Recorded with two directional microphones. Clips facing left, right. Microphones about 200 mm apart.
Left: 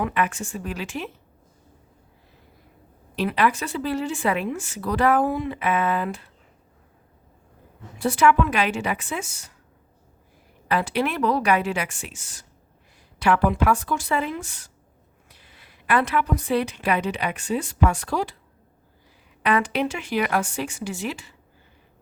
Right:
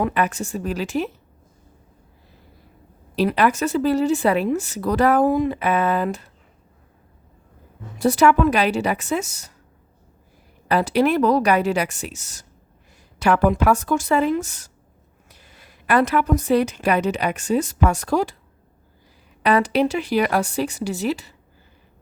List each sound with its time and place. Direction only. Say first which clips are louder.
0.0 s a woman's voice: right 3 dB; 35° right (ahead or behind)
3.2 s a woman's voice: right 4 dB; 40° right (ahead or behind)
7.9 s a woman's voice: right 3 dB; 40° right (ahead or behind)
10.7 s a woman's voice: right 6 dB; 40° right (ahead or behind)
19.4 s a woman's voice: right 5 dB; 35° right (ahead or behind)